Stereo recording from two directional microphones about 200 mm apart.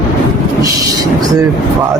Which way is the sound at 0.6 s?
15° right (ahead or behind).